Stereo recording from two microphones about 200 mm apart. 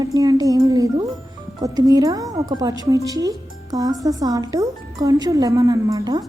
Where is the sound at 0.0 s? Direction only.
20° right (ahead or behind).